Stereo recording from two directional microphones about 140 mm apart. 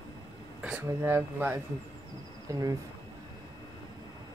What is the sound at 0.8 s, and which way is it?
Speech, 15° right (ahead or behind).